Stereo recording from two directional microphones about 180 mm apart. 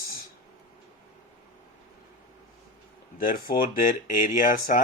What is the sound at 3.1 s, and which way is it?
Speech, 55° left (ahead or behind).